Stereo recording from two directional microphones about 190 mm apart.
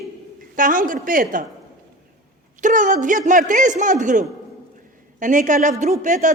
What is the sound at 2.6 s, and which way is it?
A man's voice, 40° right (ahead or behind).